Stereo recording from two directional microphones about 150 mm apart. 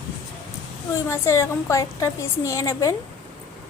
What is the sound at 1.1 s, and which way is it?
A woman's voice, 20° left (ahead or behind).